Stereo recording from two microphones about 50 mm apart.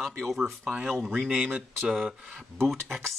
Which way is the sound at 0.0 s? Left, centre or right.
Centre.